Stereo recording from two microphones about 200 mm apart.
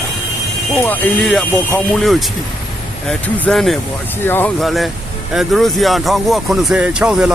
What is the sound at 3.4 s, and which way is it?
Speech, centre (ahead or behind).